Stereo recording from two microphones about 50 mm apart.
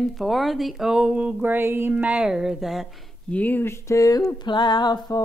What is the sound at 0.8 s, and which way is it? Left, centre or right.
Speech, centre.